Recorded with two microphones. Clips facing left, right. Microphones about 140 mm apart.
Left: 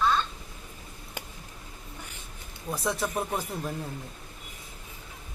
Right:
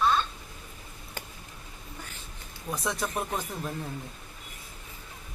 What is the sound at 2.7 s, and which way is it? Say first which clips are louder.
A woman's voice: left 2 dB; centre (ahead or behind).